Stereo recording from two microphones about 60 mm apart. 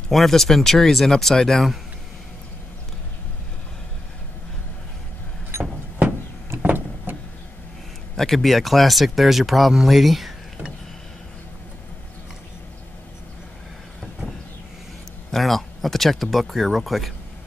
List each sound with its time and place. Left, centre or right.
0.1 s speech: centre
6.6 s vehicle: right
8.2 s speech: centre
15.3 s speech: centre